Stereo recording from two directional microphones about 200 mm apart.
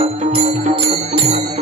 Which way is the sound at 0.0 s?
30° right (ahead or behind).